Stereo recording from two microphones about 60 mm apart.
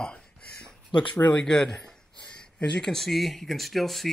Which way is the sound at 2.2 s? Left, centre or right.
Centre.